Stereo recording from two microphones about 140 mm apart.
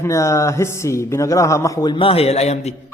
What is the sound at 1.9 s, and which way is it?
Speech, 40° left (ahead or behind).